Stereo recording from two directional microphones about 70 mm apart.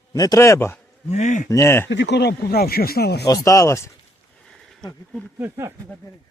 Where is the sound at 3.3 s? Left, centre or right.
Left.